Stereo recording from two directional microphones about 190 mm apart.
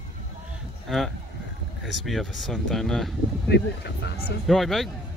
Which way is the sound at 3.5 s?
60° left (ahead or behind).